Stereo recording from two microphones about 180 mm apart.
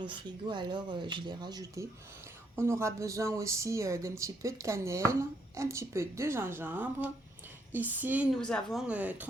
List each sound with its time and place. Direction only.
0.0 s speech: 25° right (ahead or behind); by 8.3 s 10° right (ahead or behind)
8.4 s speech: 5° left (ahead or behind)
8.9 s speech: 10° right (ahead or behind)